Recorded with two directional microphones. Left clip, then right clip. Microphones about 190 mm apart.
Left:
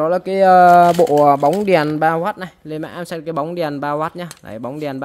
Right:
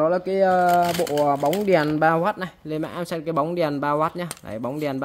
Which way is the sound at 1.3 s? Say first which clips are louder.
Left 7 dB; 40° left (ahead or behind).